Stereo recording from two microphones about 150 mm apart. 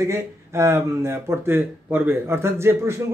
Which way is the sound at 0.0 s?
20° right (ahead or behind).